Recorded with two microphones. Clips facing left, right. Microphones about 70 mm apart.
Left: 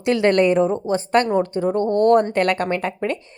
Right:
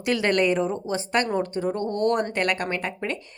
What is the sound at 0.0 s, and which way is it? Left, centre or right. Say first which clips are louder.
Speech: left 6 dB; left.